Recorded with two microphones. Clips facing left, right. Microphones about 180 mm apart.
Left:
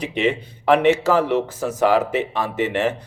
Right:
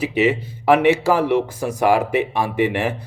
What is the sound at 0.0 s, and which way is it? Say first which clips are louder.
Speech: right 3 dB; 5° right (ahead or behind).